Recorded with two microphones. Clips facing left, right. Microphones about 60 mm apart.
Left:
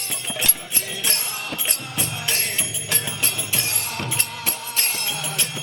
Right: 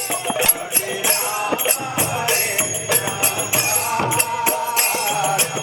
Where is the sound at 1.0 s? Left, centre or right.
Right.